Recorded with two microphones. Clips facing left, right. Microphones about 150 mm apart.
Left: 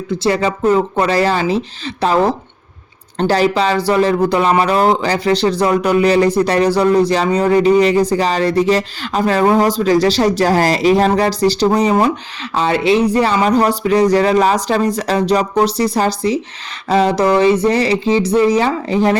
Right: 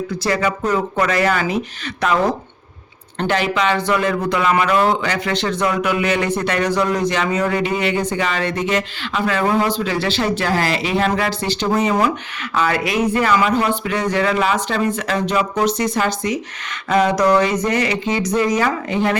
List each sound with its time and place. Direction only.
0.2 s speech: 30° left (ahead or behind)